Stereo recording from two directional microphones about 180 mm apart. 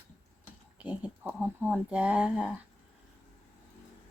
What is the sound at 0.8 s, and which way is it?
Speech, 10° right (ahead or behind).